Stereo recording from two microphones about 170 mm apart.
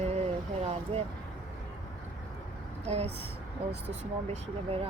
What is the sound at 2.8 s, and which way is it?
Speech, 40° right (ahead or behind).